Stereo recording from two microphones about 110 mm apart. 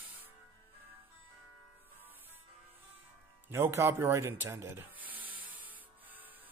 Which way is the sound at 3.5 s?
25° right (ahead or behind).